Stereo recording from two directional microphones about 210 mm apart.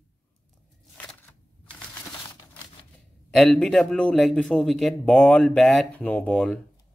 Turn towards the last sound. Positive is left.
turn(degrees=5)  # may be behind; listen again after turning